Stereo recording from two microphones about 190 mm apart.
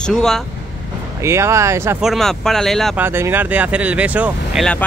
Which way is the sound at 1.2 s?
15° right (ahead or behind).